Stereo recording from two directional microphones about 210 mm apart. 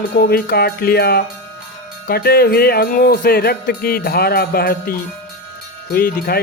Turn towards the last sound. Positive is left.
turn(degrees=45)  # may be behind; listen again after turning